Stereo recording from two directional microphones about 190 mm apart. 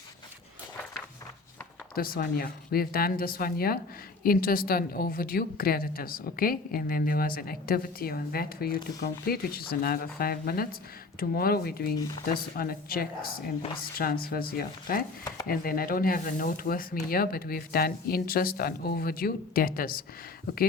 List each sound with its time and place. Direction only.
2.0 s a woman's voice: 50° left (ahead or behind)